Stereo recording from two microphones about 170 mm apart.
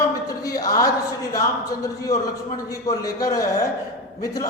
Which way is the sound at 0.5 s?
20° left (ahead or behind).